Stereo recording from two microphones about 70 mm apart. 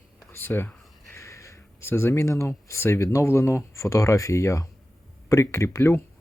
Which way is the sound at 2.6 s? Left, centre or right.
Left.